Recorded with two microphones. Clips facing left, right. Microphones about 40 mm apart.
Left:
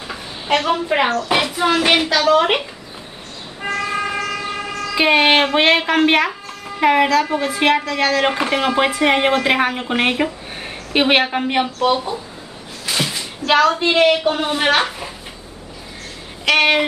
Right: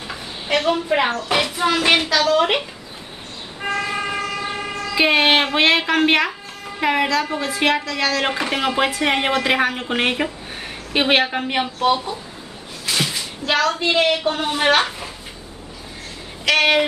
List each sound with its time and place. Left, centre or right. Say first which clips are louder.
0.0 s a sound: left 1 dB; centre
0.8 s speech: left 2 dB; centre
3.6 s vehicle: left 2 dB; right
4.9 s speech: left 2 dB; centre
8.2 s speech: left 3 dB; centre
12.8 s a sound: left 1 dB; centre
13.5 s speech: left 4 dB; centre
16.4 s speech: left 1 dB; centre